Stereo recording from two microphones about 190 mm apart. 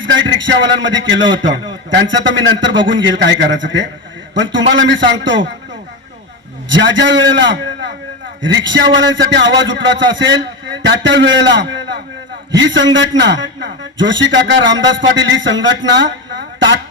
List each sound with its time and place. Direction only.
0.0 s a man's voice: 70° right (ahead or behind)
6.7 s a man's voice: 70° right (ahead or behind)